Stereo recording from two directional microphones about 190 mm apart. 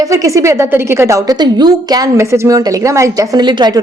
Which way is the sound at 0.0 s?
15° right (ahead or behind).